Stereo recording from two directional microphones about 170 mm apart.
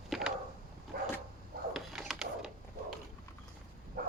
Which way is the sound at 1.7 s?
Centre (ahead or behind).